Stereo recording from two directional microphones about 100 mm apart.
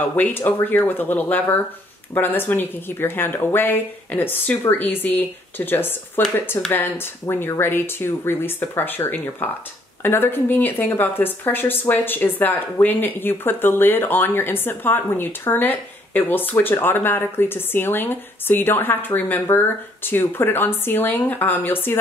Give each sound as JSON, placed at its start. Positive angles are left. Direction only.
{"t": 0.1, "sound": "speech", "side_deg": 20}